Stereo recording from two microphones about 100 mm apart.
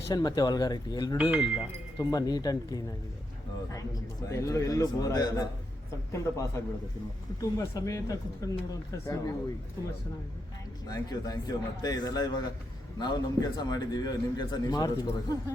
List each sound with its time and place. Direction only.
0.1 s a man's voice: 40° left (ahead or behind)
1.2 s speech: 15° right (ahead or behind)
2.0 s a man's voice: 40° left (ahead or behind)
4.3 s a man's voice: 30° left (ahead or behind)
10.8 s a man's voice: 40° left (ahead or behind)